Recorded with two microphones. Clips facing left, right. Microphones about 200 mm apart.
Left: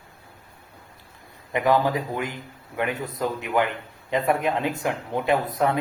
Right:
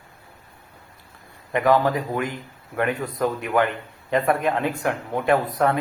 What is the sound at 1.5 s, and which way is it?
A man's voice, 15° left (ahead or behind).